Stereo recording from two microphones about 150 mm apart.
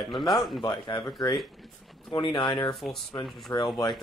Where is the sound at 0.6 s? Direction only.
30° left (ahead or behind).